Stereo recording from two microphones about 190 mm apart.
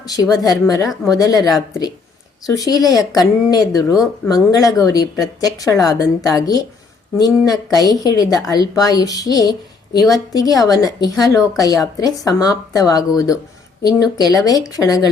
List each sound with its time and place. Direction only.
0.0 s a woman's voice: 20° left (ahead or behind)